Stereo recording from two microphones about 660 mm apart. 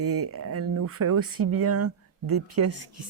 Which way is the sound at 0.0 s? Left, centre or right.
Centre.